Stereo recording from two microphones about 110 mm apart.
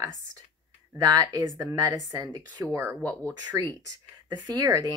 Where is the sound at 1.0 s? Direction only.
35° right (ahead or behind).